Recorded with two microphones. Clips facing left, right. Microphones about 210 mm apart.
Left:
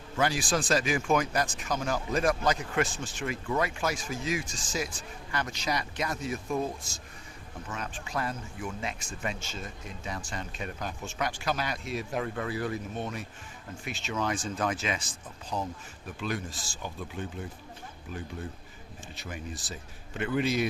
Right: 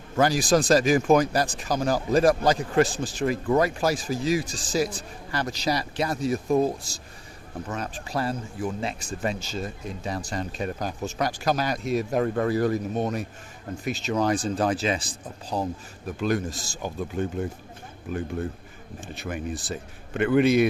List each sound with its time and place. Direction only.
0.2 s a man's voice: 40° right (ahead or behind); by 20.7 s 60° right (ahead or behind)